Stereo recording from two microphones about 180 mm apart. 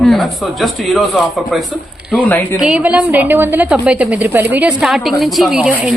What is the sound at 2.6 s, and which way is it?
A woman's voice, 5° right (ahead or behind).